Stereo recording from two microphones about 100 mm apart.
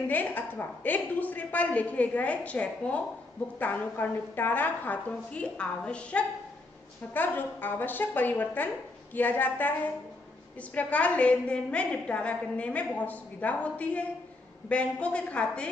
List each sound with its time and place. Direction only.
0.1 s a woman's voice: 15° left (ahead or behind)